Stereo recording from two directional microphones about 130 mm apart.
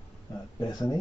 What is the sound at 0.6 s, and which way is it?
Speech, 30° left (ahead or behind).